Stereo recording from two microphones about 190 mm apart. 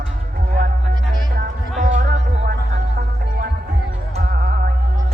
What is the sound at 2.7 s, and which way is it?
Music, 55° right (ahead or behind).